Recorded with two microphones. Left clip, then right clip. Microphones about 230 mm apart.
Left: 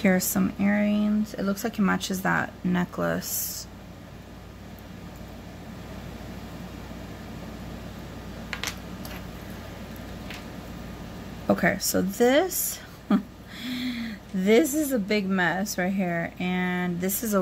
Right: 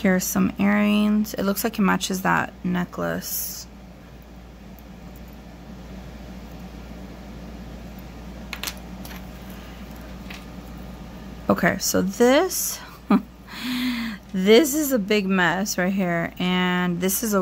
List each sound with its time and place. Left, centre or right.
0.0 s speech: centre
11.4 s a woman's voice: centre